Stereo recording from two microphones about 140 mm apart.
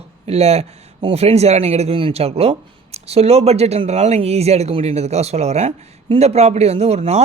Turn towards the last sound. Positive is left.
turn(degrees=-50)  # may be behind; listen again after turning